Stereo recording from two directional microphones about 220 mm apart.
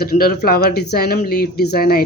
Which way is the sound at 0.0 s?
45° left (ahead or behind).